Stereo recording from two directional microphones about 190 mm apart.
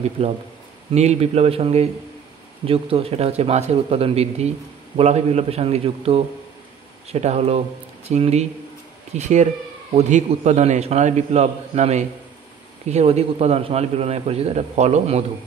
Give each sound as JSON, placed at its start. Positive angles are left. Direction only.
{"t": 0.2, "sound": "a man's voice", "side_deg": -35}